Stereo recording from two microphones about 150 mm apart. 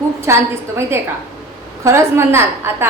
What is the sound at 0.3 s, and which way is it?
Speech, 20° right (ahead or behind).